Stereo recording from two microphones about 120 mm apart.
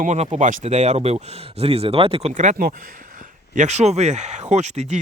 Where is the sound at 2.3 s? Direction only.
85° right.